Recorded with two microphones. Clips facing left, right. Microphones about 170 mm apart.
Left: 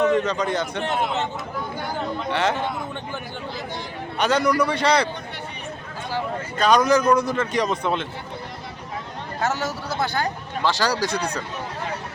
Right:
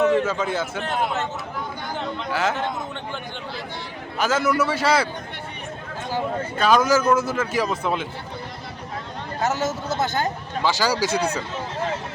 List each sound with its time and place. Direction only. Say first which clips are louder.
0.0 s a man's voice: even; 5° right (ahead or behind)
0.9 s speech: even; 20° left (ahead or behind)
2.3 s a man's voice: left 1 dB; centre (ahead or behind)
4.2 s a man's voice: left 1 dB; centre (ahead or behind)
6.6 s a man's voice: left 1 dB; 5° right (ahead or behind)
9.4 s speech: right 2 dB; 20° right (ahead or behind)
10.6 s a man's voice: right 1 dB; centre (ahead or behind)